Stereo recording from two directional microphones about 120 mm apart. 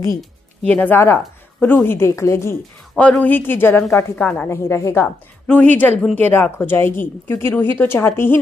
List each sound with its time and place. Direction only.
0.2 s speech: 10° left (ahead or behind)
2.9 s speech: 10° left (ahead or behind)
4.5 s speech: 20° left (ahead or behind)